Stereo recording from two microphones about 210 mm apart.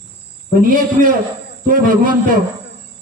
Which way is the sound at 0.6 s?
40° right (ahead or behind).